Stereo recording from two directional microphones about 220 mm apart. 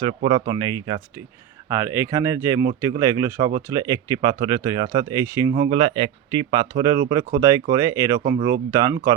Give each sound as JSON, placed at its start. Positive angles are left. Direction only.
{"t": 0.0, "sound": "speech", "side_deg": -20}